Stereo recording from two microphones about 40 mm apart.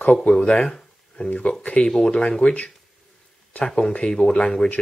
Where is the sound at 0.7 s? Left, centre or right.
Centre.